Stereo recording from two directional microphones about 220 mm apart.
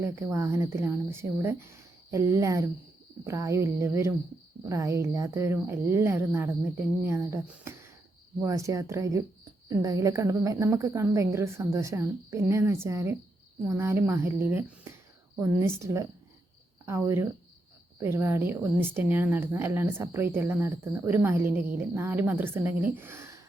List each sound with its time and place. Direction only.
0.0 s a woman's voice: 10° right (ahead or behind)